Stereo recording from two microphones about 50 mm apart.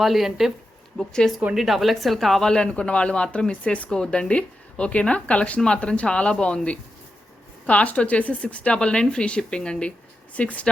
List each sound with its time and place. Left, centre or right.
0.0 s speech: centre
1.2 s a woman's voice: centre
1.5 s speech: centre
2.5 s a woman's voice: centre
3.8 s a woman's voice: centre
7.7 s a woman's voice: left